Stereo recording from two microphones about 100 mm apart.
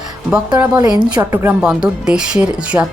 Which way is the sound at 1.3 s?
25° right (ahead or behind).